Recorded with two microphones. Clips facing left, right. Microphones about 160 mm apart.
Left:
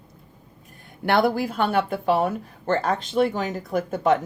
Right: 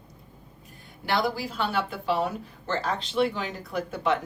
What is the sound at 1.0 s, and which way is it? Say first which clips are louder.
A woman's voice: left 7 dB; 55° left (ahead or behind).